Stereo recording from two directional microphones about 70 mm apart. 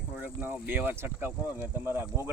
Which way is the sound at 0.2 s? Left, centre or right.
Right.